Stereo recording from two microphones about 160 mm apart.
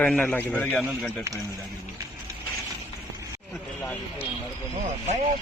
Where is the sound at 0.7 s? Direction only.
Centre (ahead or behind).